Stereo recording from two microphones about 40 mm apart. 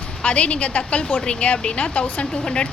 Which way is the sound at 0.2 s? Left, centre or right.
Left.